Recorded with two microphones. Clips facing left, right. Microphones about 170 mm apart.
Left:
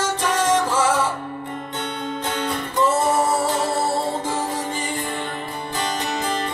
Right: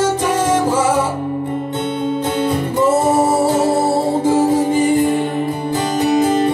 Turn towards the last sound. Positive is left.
turn(degrees=-20)  # may be behind; listen again after turning